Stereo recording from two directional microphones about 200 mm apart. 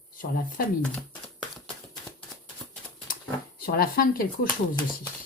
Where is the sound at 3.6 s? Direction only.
50° left (ahead or behind).